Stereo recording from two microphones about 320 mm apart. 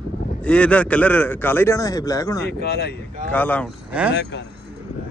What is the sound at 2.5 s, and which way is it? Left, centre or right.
Speech, left.